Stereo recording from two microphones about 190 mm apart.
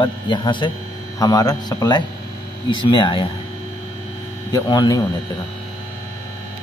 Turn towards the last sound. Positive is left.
turn(degrees=20)  # may be behind; listen again after turning